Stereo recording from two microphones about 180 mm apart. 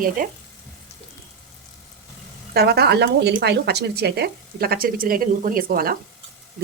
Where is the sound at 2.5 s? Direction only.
65° right (ahead or behind).